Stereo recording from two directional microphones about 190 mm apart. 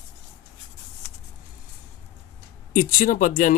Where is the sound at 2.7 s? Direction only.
45° left (ahead or behind).